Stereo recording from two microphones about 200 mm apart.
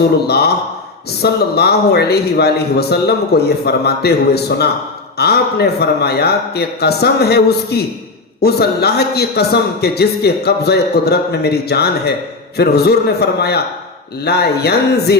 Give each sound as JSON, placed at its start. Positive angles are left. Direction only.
{"t": 0.3, "sound": "a man's voice", "side_deg": 55}